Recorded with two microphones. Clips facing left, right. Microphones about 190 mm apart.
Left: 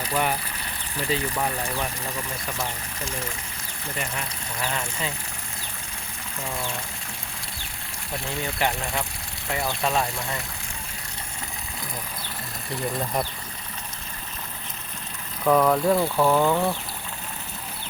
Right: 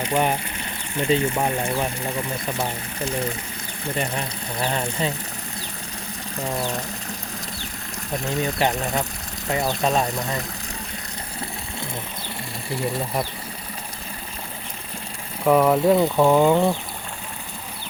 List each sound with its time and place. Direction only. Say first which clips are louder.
0.0 s speech: right 4 dB; 30° right (ahead or behind)
6.3 s speech: right 6 dB; 35° right (ahead or behind)
8.1 s speech: right 6 dB; 40° right (ahead or behind)
9.6 s speech: right 3 dB; 20° right (ahead or behind)
15.4 s speech: right 3 dB; 10° right (ahead or behind)